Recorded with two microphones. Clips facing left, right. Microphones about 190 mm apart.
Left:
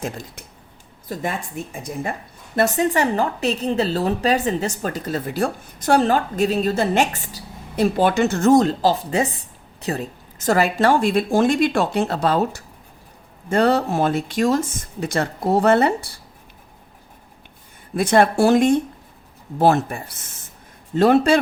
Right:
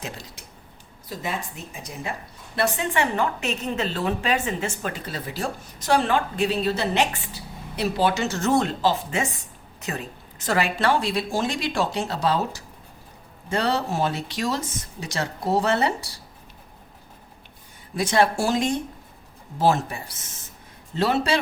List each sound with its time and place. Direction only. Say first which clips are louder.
0.0 s a woman's voice: left 7 dB; 50° left (ahead or behind)
17.9 s speech: left 5 dB; 55° left (ahead or behind)